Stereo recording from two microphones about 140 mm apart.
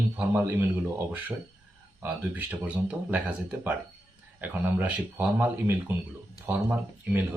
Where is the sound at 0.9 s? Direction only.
10° right (ahead or behind).